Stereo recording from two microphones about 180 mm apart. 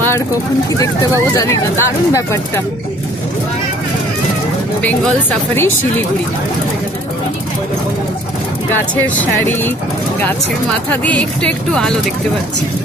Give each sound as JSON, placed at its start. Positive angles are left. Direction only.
{"t": 0.7, "sound": "speech", "side_deg": 20}
{"t": 4.8, "sound": "speech", "side_deg": 5}
{"t": 9.0, "sound": "speech", "side_deg": 10}
{"t": 10.9, "sound": "speech", "side_deg": 10}